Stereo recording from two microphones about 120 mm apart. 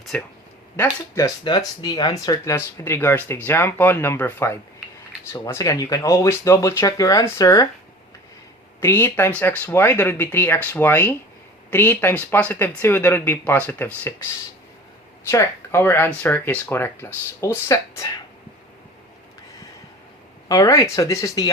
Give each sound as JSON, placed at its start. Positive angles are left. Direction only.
{"t": 0.1, "sound": "speech", "side_deg": 10}
{"t": 1.5, "sound": "speech", "side_deg": 35}
{"t": 8.8, "sound": "speech", "side_deg": 15}
{"t": 15.3, "sound": "speech", "side_deg": 20}
{"t": 20.5, "sound": "speech", "side_deg": 30}